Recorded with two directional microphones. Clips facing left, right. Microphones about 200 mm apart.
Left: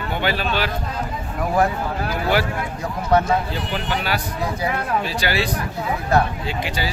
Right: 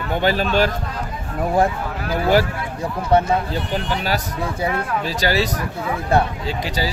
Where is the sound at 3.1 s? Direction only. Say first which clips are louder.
Right 1 dB; 25° right (ahead or behind).